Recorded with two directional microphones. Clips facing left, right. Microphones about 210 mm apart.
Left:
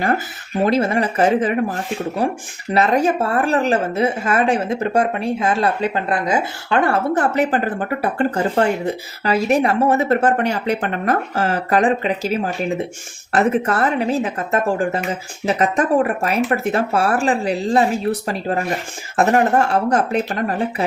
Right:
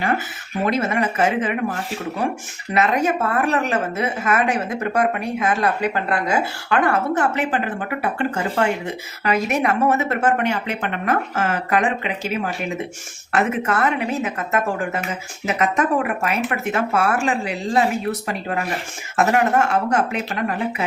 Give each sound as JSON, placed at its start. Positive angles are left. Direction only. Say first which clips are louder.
{"t": 0.6, "sound": "a woman's voice", "louder": "left 3 dB", "side_deg": 30}